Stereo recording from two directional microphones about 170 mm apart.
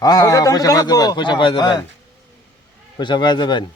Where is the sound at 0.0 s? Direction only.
20° left (ahead or behind).